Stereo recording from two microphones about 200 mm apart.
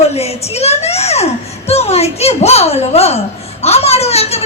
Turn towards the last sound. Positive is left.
turn(degrees=30)  # may be behind; listen again after turning